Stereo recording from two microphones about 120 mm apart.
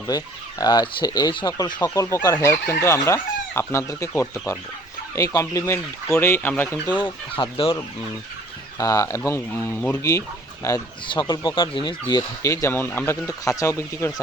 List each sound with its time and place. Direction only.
0.6 s speech: 35° left (ahead or behind); by 6.5 s 20° left (ahead or behind)
6.8 s speech: 40° left (ahead or behind)
8.8 s speech: 25° left (ahead or behind)
11.1 s speech: 35° left (ahead or behind)
12.4 s speech: 25° left (ahead or behind)
13.2 s speech: 30° left (ahead or behind)